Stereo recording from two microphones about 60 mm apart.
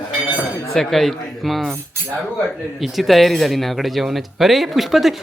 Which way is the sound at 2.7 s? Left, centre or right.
Centre.